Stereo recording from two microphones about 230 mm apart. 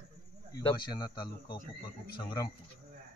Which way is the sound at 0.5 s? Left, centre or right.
Centre.